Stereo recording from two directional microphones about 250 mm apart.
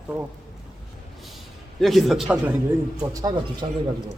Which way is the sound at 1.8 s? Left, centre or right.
Centre.